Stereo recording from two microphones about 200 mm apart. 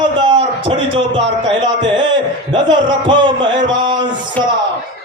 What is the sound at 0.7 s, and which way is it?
Speech, 25° right (ahead or behind).